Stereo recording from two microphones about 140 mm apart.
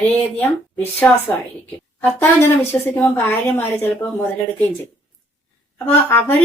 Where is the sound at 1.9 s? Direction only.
15° left (ahead or behind).